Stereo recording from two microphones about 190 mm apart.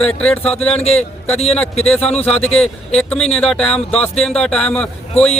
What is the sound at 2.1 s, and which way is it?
A man's voice, 10° left (ahead or behind).